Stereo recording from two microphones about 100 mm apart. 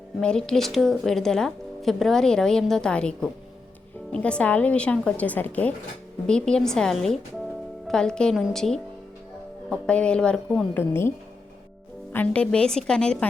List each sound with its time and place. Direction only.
0.2 s speech: 10° left (ahead or behind)
10.8 s a woman's voice: 25° left (ahead or behind)
12.1 s speech: 15° left (ahead or behind)